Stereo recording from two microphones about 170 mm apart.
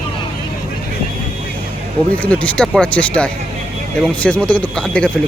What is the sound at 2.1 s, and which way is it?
Speech, 10° left (ahead or behind).